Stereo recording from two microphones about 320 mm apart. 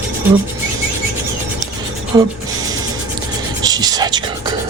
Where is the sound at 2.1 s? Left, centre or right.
Centre.